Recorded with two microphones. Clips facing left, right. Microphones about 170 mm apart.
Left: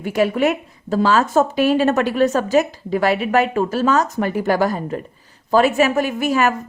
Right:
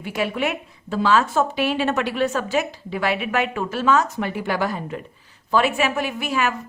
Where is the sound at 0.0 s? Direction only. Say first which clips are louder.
Left 7 dB; 45° left (ahead or behind).